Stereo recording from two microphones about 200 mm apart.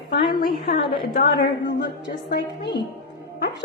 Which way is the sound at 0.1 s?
50° left (ahead or behind).